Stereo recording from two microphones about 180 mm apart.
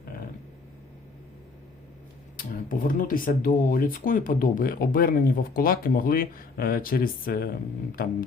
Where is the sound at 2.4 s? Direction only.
50° left (ahead or behind).